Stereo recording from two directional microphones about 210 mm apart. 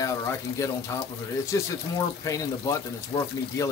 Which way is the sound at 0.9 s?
15° left (ahead or behind).